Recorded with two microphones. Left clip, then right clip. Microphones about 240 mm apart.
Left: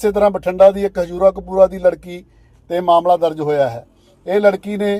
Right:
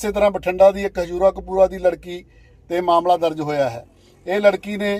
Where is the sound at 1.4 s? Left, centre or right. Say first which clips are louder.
Left 4 dB; left.